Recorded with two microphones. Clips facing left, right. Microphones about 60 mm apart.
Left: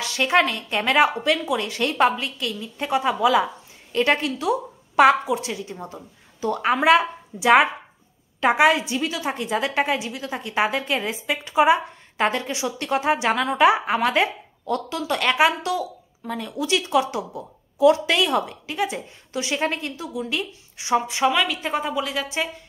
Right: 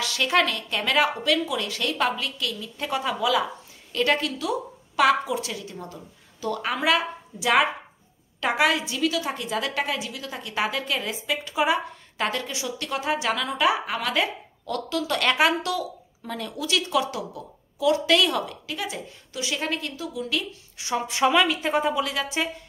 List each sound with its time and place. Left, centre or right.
0.0 s a woman's voice: left
21.1 s a woman's voice: centre